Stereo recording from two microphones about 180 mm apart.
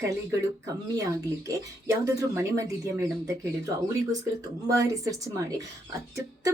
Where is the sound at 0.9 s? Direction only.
20° right (ahead or behind).